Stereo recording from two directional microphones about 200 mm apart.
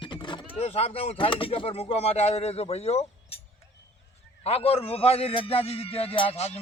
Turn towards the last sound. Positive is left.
turn(degrees=30)  # may be behind; listen again after turning